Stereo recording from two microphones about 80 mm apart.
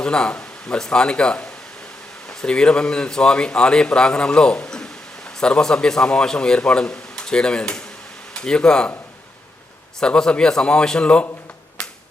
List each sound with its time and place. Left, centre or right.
0.0 s speech: centre
10.0 s speech: centre